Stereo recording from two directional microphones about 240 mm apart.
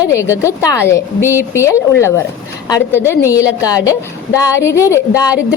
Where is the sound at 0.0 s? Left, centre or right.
Centre.